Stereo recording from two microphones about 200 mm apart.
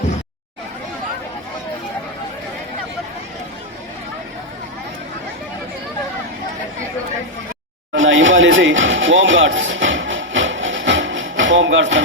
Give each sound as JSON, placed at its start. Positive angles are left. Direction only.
{"t": 7.9, "sound": "music", "side_deg": -70}